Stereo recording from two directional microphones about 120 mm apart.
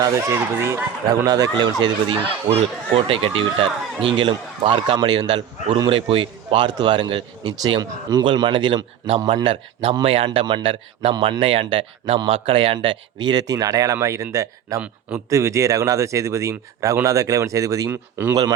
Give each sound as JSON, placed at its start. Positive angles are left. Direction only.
{"t": 0.0, "sound": "a man's voice", "side_deg": -25}
{"t": 2.5, "sound": "a man's voice", "side_deg": -55}
{"t": 4.9, "sound": "a man's voice", "side_deg": -35}